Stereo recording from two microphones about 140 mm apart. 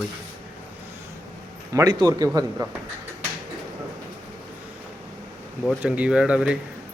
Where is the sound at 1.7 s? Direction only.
25° right (ahead or behind).